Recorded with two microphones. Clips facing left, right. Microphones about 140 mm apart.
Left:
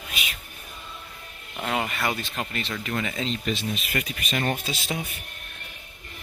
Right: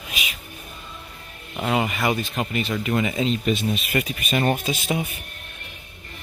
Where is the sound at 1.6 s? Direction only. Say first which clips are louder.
Right 5 dB; 10° right (ahead or behind).